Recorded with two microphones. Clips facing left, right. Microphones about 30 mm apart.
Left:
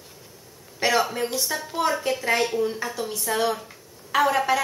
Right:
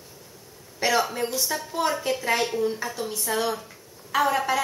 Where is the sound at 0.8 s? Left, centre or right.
Centre.